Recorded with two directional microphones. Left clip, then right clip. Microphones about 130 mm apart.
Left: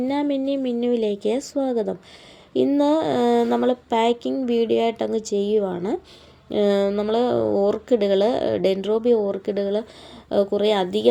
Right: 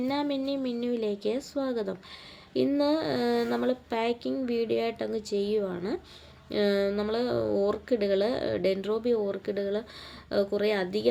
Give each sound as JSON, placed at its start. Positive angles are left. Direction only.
{"t": 0.0, "sound": "speech", "side_deg": 20}
{"t": 7.4, "sound": "speech", "side_deg": 0}
{"t": 7.7, "sound": "speech", "side_deg": 25}